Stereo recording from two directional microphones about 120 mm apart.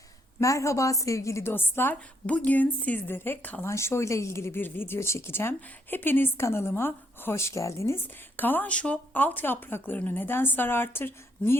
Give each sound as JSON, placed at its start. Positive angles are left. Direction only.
{"t": 0.3, "sound": "a woman's voice", "side_deg": 25}